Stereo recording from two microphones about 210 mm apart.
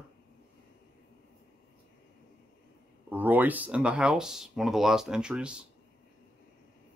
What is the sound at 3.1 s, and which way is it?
Speech, 10° right (ahead or behind).